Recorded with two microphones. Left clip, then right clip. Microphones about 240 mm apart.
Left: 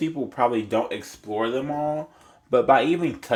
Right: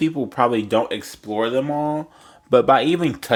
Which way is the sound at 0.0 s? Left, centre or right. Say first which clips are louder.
Right 4 dB; right.